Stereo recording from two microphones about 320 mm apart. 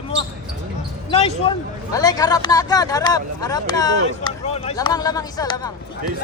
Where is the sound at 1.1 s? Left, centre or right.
Centre.